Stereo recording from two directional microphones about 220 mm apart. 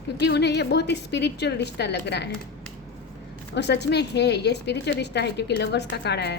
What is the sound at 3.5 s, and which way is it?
A woman's voice, 50° left (ahead or behind).